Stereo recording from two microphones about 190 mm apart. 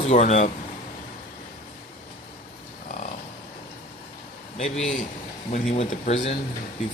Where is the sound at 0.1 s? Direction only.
35° left (ahead or behind).